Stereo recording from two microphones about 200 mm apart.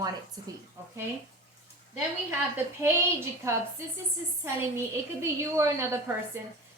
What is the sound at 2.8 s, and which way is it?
A woman's voice, 15° right (ahead or behind).